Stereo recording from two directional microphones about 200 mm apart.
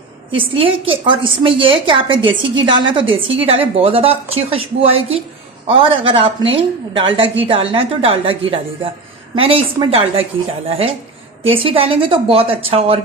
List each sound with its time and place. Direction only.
0.6 s a woman's voice: 25° right (ahead or behind)
9.3 s a woman's voice: 30° right (ahead or behind)